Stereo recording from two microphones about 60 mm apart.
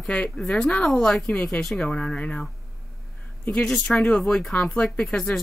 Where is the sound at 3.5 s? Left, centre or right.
Centre.